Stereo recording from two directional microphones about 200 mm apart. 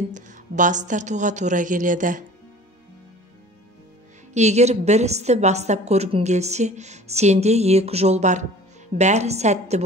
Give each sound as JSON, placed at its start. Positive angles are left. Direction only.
{"t": 0.1, "sound": "a woman's voice", "side_deg": -40}
{"t": 4.3, "sound": "a woman's voice", "side_deg": -35}